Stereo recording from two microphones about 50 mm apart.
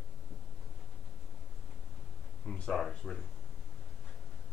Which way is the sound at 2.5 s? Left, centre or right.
Centre.